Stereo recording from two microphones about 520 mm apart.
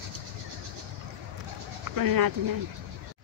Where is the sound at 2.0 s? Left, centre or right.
Right.